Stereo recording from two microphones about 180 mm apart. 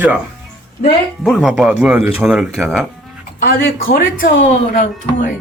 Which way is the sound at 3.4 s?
55° left (ahead or behind).